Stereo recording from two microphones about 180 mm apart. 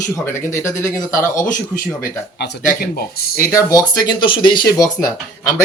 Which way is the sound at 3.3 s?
20° left (ahead or behind).